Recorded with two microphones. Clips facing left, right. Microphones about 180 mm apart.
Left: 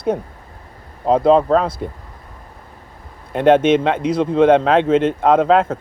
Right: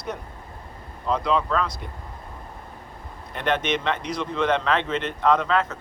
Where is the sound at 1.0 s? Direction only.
45° left (ahead or behind).